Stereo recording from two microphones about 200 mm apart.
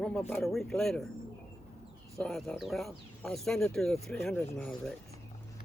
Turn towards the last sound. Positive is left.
turn(degrees=5)  # may be behind; listen again after turning